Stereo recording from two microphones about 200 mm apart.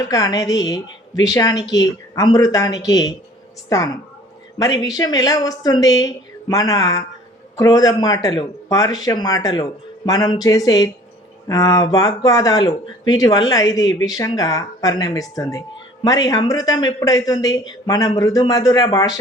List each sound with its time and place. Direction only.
0.0 s speech: 20° left (ahead or behind)